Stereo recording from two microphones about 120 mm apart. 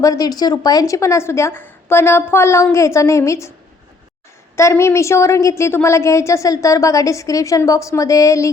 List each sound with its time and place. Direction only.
0.0 s a woman's voice: 30° left (ahead or behind)
4.5 s a woman's voice: 25° left (ahead or behind)